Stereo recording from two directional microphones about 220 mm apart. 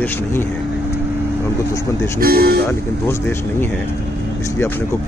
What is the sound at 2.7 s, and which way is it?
Speech, 10° left (ahead or behind).